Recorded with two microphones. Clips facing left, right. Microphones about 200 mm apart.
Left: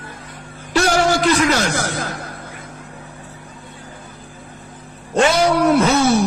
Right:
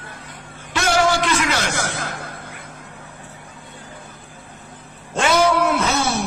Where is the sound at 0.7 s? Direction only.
40° left (ahead or behind).